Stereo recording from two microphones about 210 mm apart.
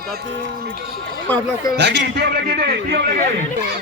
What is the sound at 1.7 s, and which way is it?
A man's voice, 55° right (ahead or behind).